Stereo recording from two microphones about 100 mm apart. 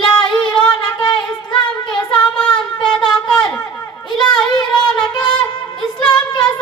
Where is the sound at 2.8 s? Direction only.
5° left (ahead or behind).